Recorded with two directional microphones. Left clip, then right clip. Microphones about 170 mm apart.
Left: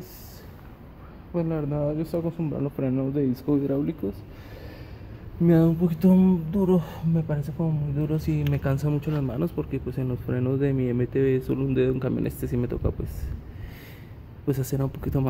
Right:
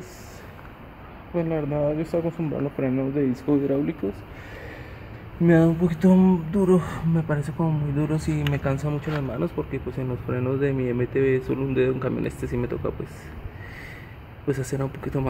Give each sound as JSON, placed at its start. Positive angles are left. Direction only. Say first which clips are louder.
{"t": 1.3, "sound": "speech", "louder": "right 3 dB", "side_deg": 5}
{"t": 5.4, "sound": "speech", "louder": "right 2 dB", "side_deg": 0}
{"t": 8.6, "sound": "speech", "louder": "right 1 dB", "side_deg": 15}
{"t": 14.5, "sound": "speech", "louder": "right 1 dB", "side_deg": 15}